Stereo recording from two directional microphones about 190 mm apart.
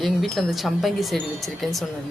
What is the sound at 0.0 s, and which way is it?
Speech, centre (ahead or behind).